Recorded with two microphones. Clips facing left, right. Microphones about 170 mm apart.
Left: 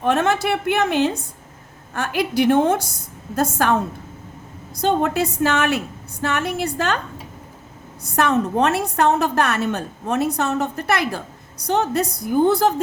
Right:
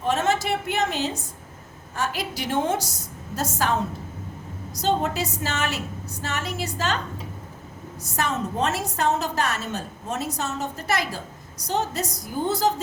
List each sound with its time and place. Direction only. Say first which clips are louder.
0.0 s a woman's voice: left 4 dB; 60° left (ahead or behind)
4.8 s a woman's voice: left 5 dB; 55° left (ahead or behind)
8.0 s a woman's voice: left 8 dB; 60° left (ahead or behind)